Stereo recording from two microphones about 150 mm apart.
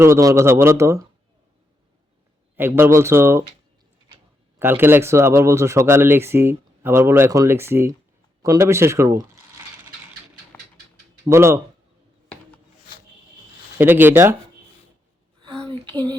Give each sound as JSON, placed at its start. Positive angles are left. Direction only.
{"t": 0.0, "sound": "speech", "side_deg": -20}
{"t": 2.6, "sound": "speech", "side_deg": -15}
{"t": 4.6, "sound": "speech", "side_deg": -15}
{"t": 11.3, "sound": "speech", "side_deg": -20}
{"t": 13.7, "sound": "speech", "side_deg": -15}
{"t": 15.7, "sound": "a sound", "side_deg": -30}